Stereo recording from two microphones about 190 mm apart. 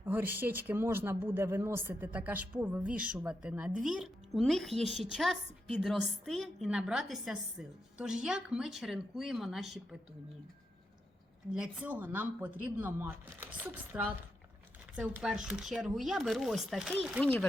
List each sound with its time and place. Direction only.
0.0 s a woman's voice: 10° right (ahead or behind)
11.5 s a woman's voice: 5° right (ahead or behind)